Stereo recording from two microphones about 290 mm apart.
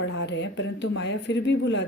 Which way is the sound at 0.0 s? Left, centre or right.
Left.